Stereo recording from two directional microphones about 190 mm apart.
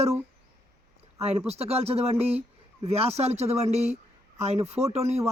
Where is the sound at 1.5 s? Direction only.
35° right (ahead or behind).